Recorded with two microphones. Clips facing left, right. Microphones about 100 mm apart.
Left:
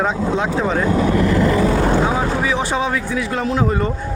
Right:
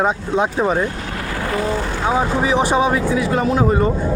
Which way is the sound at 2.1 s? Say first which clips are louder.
Right 2 dB; 15° right (ahead or behind).